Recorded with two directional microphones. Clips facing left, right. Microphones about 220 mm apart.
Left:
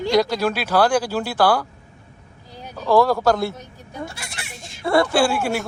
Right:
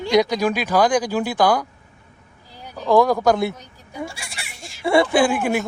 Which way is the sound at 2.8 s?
15° right (ahead or behind).